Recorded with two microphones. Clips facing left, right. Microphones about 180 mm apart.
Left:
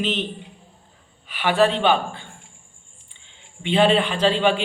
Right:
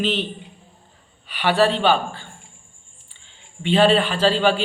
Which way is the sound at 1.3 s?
5° left (ahead or behind).